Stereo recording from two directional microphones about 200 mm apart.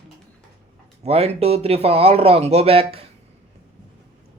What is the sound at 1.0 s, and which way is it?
Speech, 30° right (ahead or behind).